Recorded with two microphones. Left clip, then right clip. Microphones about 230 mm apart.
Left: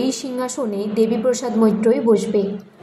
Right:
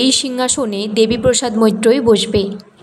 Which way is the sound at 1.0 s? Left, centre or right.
Right.